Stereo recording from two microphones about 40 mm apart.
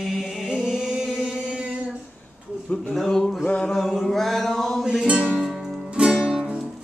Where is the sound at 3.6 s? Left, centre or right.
Centre.